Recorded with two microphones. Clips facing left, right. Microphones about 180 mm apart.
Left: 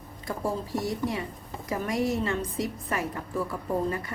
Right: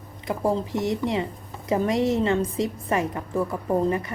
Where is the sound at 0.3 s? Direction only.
20° right (ahead or behind).